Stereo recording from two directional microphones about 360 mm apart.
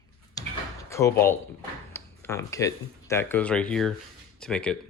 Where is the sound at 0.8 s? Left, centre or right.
Centre.